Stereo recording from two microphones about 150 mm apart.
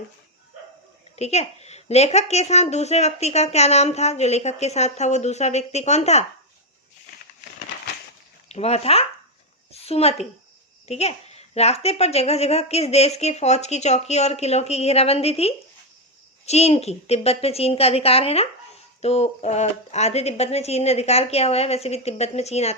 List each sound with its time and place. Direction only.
1.1 s a woman's voice: 45° left (ahead or behind)
8.4 s a woman's voice: 45° left (ahead or behind)